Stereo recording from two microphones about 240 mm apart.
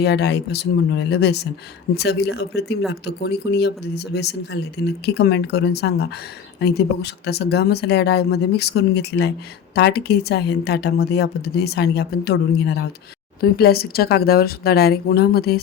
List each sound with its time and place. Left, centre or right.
0.0 s speech: left